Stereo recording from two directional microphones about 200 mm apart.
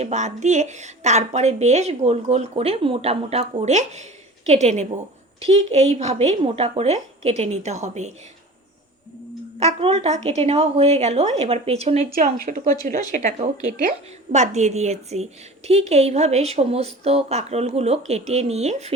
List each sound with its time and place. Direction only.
0.0 s a woman's voice: 35° right (ahead or behind)
9.6 s a woman's voice: 30° right (ahead or behind)
12.1 s a woman's voice: 45° right (ahead or behind)